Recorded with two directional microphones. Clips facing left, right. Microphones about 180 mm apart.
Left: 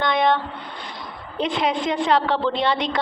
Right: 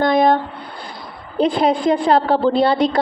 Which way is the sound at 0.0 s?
45° right (ahead or behind).